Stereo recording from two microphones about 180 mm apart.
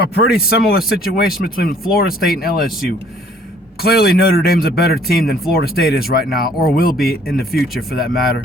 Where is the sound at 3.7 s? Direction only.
60° left (ahead or behind).